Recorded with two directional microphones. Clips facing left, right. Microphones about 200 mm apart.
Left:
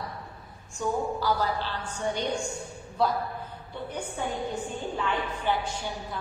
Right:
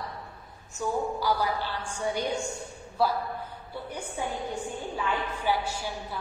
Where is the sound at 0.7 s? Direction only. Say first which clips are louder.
Left 1 dB; 10° right (ahead or behind).